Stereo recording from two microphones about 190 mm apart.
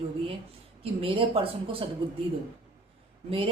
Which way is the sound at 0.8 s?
30° right (ahead or behind).